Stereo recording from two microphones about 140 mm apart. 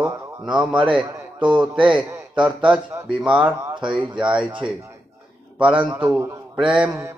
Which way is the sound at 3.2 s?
10° right (ahead or behind).